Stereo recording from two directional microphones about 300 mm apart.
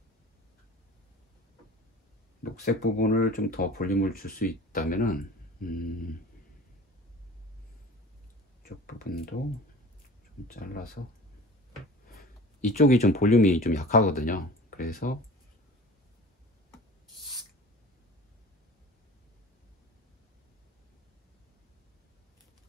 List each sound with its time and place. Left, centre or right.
2.6 s speech: left
8.6 s speech: left
10.5 s speech: left
12.2 s speech: left